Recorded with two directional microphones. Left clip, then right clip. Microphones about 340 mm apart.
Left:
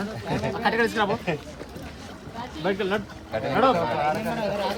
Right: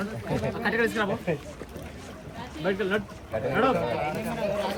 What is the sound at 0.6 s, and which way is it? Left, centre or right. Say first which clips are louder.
Speech: left 4 dB; centre.